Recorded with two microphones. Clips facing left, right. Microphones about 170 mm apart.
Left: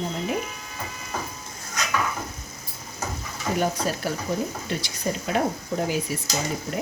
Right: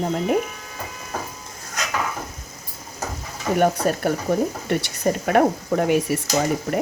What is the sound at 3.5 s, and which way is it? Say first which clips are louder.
Speech: right 6 dB; 60° right (ahead or behind).